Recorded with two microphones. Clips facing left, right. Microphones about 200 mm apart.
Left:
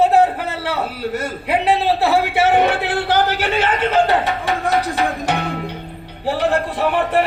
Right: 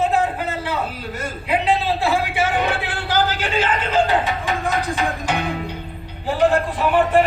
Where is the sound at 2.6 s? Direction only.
65° left (ahead or behind).